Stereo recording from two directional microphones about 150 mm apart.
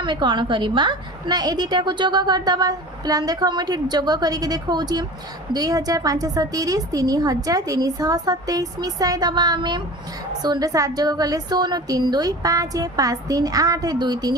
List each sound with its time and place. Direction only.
0.0 s a woman's voice: 30° right (ahead or behind)